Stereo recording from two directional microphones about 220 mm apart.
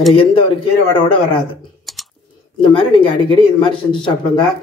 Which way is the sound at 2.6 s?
20° left (ahead or behind).